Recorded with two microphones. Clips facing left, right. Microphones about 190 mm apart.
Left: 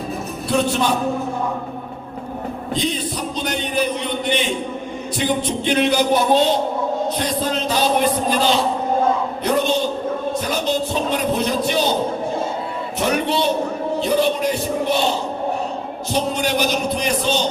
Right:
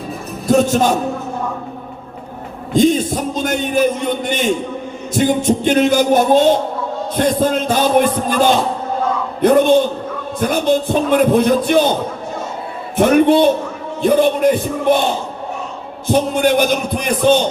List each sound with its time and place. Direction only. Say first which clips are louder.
0.4 s a man's voice: right 6 dB; 45° right (ahead or behind)
2.7 s a man's voice: right 11 dB; 45° right (ahead or behind)
13.0 s a man's voice: right 10 dB; 50° right (ahead or behind)